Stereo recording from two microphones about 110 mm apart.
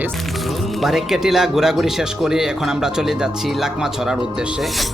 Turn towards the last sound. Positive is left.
turn(degrees=-5)  # may be behind; listen again after turning